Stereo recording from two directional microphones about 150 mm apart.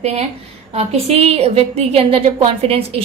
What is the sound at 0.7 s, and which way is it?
A woman's voice, 45° right (ahead or behind).